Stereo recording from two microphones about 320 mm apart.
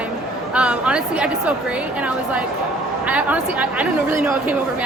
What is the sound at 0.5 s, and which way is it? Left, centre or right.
Speech, centre.